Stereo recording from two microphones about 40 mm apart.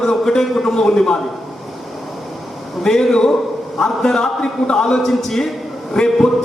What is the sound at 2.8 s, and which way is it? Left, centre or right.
A man's voice, centre.